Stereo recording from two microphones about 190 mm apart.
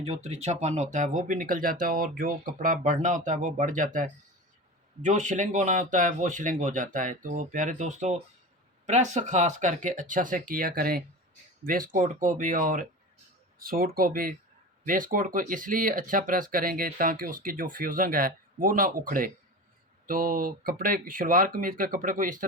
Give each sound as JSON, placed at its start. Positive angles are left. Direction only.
{"t": 0.0, "sound": "speech", "side_deg": -35}